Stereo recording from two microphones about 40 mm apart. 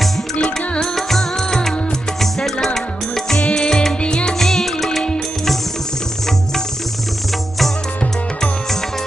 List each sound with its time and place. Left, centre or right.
0.4 s music: centre
4.4 s music: centre